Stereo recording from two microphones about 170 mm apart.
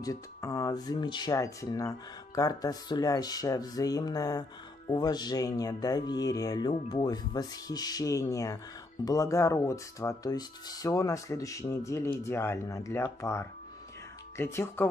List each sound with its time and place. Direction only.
0.0 s speech: 20° left (ahead or behind)